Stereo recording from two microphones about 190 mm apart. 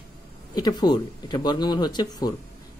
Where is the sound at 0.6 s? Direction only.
20° left (ahead or behind).